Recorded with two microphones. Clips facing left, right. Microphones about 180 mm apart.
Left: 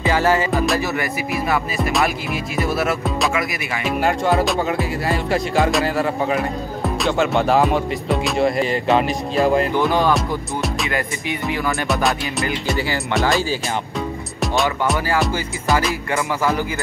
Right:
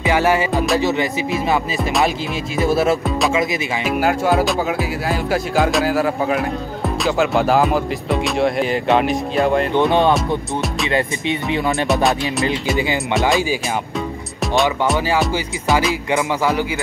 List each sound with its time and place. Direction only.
0.0 s music: 15° right (ahead or behind)
0.5 s music: centre (ahead or behind)
0.7 s speech: 20° right (ahead or behind)
1.8 s music: centre (ahead or behind)
2.5 s speech: 25° right (ahead or behind)
3.8 s music: centre (ahead or behind)
9.8 s speech: 25° right (ahead or behind)
10.1 s music: centre (ahead or behind)
10.9 s speech: 25° right (ahead or behind)
11.9 s music: centre (ahead or behind)
12.7 s music: 20° right (ahead or behind)
14.4 s speech: centre (ahead or behind)
15.9 s music: 15° right (ahead or behind)